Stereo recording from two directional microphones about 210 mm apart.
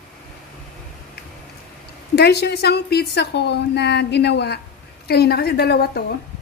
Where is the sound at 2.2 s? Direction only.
50° left (ahead or behind).